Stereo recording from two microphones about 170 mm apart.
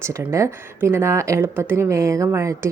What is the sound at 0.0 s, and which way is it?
Speech, 15° right (ahead or behind).